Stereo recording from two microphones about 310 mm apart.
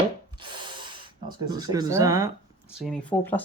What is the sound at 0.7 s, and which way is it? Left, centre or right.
Speech, centre.